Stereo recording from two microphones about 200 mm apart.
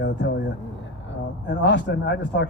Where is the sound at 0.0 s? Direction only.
60° left (ahead or behind).